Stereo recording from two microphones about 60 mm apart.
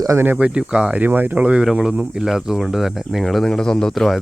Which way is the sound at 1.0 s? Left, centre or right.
Right.